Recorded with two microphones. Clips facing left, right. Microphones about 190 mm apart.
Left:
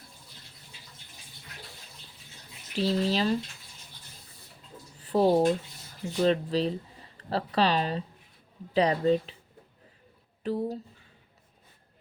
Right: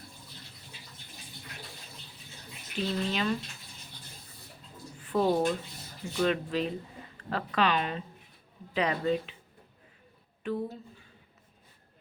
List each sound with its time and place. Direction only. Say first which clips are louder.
2.7 s speech: left 5 dB; 35° left (ahead or behind)
4.9 s speech: left 4 dB; 35° left (ahead or behind)
10.4 s speech: left 3 dB; 35° left (ahead or behind)